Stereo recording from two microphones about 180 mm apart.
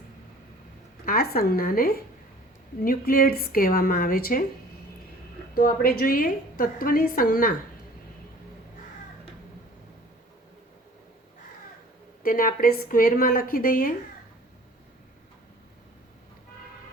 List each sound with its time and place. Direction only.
1.0 s a woman's voice: 55° left (ahead or behind)
5.5 s a woman's voice: 55° left (ahead or behind)
12.2 s a woman's voice: 50° left (ahead or behind)